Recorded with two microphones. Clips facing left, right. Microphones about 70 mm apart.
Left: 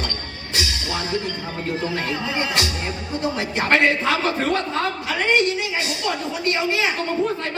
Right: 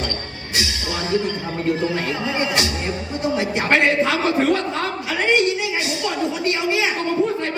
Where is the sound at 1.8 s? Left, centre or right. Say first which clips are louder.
Right 2 dB; right.